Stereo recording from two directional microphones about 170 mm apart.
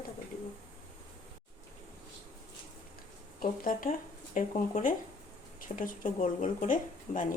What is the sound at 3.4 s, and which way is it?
Speech, 55° left (ahead or behind).